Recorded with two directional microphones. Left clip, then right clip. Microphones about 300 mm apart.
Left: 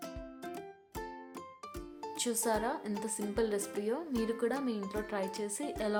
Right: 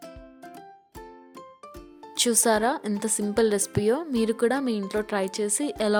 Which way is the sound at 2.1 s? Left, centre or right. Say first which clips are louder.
Right 11 dB; right.